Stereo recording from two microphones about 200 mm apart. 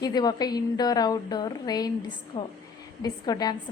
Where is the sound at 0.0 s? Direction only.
20° left (ahead or behind).